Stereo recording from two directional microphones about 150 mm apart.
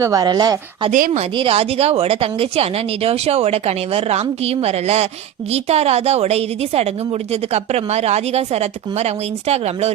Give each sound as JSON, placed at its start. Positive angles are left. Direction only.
{"t": 0.0, "sound": "speech", "side_deg": -25}
{"t": 0.9, "sound": "speech", "side_deg": -55}
{"t": 1.4, "sound": "speech", "side_deg": -40}